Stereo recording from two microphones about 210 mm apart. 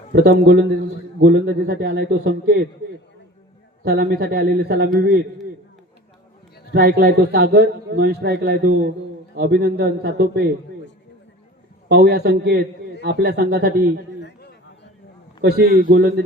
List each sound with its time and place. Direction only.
0.1 s a man's voice: 50° right (ahead or behind)
3.8 s a man's voice: 50° right (ahead or behind)
6.7 s a man's voice: 50° right (ahead or behind)
11.9 s a man's voice: 50° right (ahead or behind)
15.4 s a man's voice: 50° right (ahead or behind)